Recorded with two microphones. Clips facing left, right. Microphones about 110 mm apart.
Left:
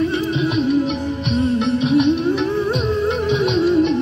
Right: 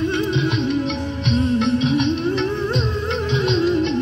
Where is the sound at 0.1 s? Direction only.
5° left (ahead or behind).